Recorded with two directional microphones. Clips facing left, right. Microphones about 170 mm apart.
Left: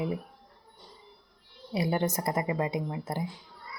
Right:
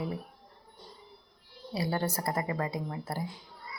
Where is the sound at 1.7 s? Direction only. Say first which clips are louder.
Left 3 dB; 20° left (ahead or behind).